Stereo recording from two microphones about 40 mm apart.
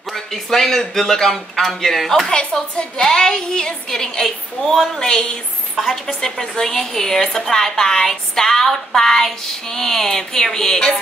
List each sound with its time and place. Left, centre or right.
0.1 s a woman's voice: centre
6.4 s a woman's voice: centre